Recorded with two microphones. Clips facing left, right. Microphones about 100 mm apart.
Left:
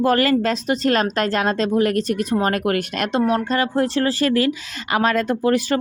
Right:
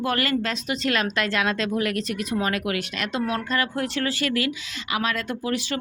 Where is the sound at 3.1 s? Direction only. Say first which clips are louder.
Left 7 dB; 30° left (ahead or behind).